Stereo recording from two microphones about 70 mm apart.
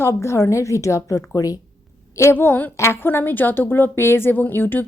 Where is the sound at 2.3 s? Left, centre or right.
Left.